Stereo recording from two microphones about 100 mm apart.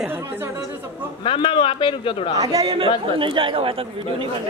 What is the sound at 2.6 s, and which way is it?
Speech, 55° right (ahead or behind).